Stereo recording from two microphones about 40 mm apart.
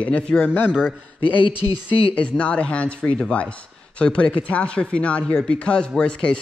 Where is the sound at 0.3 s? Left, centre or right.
Left.